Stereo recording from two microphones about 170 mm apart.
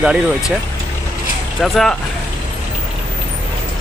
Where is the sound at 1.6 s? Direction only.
Centre (ahead or behind).